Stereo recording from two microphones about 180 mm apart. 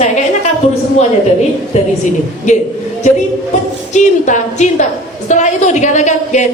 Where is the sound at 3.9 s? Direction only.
40° left (ahead or behind).